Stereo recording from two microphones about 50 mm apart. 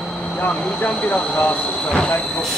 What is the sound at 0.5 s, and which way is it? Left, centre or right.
Speech, centre.